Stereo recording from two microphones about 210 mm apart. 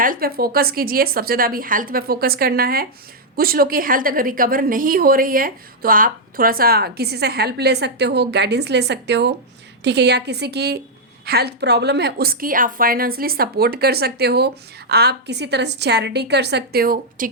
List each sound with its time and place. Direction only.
0.0 s a woman's voice: 45° right (ahead or behind)